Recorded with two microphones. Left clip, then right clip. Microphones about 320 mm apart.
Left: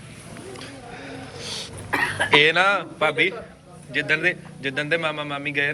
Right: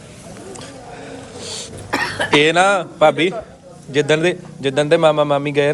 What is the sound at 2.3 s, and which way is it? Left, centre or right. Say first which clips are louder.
Speech: right 4 dB; centre.